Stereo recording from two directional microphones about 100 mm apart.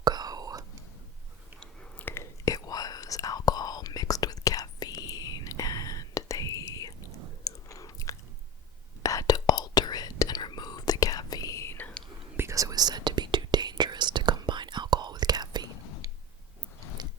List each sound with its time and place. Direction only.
0.0 s whispering: 45° right (ahead or behind)
1.5 s chewing: 10° left (ahead or behind)
2.0 s whispering: 30° left (ahead or behind)
7.4 s chewing: 35° left (ahead or behind)
9.0 s whispering: 35° left (ahead or behind)
12.4 s whispering: 30° right (ahead or behind)
17.0 s biting: 45° right (ahead or behind)